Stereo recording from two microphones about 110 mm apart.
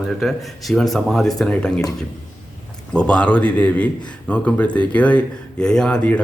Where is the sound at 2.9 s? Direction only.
10° left (ahead or behind).